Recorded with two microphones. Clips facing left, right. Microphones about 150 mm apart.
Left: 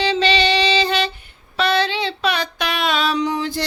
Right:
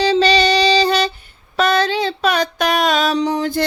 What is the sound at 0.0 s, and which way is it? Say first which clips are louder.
Music: right 4 dB; 40° right (ahead or behind).